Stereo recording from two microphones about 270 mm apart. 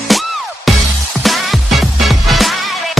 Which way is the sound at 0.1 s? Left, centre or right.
Centre.